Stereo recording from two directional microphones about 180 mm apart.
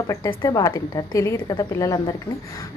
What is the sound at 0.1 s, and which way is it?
A woman's voice, 20° left (ahead or behind).